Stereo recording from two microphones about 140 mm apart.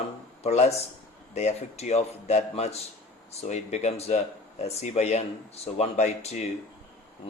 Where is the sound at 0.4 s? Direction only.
50° left (ahead or behind).